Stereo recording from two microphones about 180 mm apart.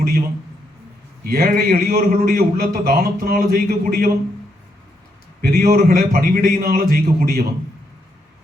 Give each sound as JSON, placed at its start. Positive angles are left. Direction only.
{"t": 1.2, "sound": "a man's voice", "side_deg": -55}
{"t": 5.4, "sound": "a man's voice", "side_deg": -55}